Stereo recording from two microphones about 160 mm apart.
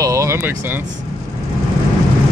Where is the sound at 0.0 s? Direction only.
20° right (ahead or behind).